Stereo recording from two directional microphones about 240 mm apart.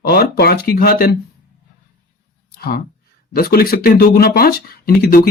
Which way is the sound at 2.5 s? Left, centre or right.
Left.